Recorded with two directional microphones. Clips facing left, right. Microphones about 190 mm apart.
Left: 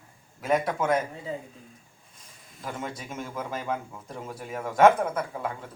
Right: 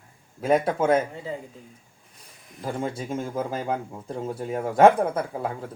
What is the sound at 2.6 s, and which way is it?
Speech, 30° right (ahead or behind).